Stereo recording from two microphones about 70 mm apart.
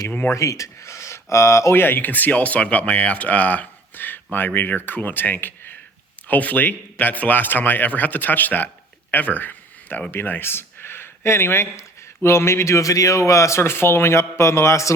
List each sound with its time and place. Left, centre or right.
0.1 s speech: left
0.3 s speech: left